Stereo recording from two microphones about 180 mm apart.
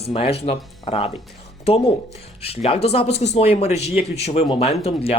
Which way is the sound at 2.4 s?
35° left (ahead or behind).